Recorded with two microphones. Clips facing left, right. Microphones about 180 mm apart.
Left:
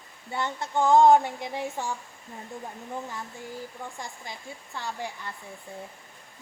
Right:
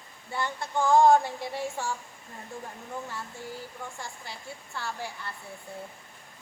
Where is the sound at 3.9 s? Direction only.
15° left (ahead or behind).